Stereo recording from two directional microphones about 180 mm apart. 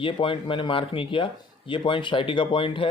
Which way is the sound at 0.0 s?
30° left (ahead or behind).